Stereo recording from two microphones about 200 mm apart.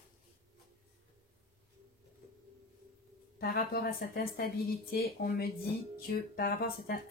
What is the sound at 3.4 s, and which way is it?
Speech, 50° left (ahead or behind).